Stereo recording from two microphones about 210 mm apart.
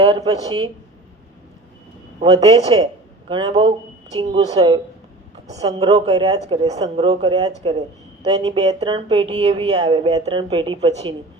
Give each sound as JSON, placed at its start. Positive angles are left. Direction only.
{"t": 0.0, "sound": "speech", "side_deg": -20}
{"t": 2.3, "sound": "speech", "side_deg": -15}
{"t": 5.8, "sound": "speech", "side_deg": -25}